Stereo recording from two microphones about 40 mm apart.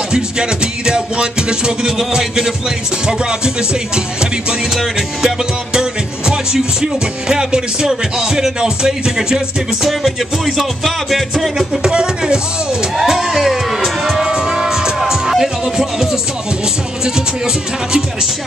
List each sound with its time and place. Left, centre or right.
0.1 s music: right
9.8 s music: centre
11.8 s music: right
13.0 s music: centre